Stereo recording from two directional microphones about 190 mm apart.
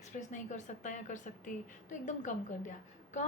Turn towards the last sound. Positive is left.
turn(degrees=40)  # may be behind; listen again after turning